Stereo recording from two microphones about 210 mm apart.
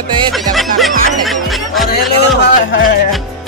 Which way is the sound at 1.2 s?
Centre (ahead or behind).